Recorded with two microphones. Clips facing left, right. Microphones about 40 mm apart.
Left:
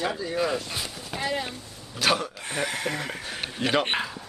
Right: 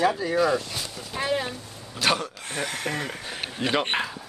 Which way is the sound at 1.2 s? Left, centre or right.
Right.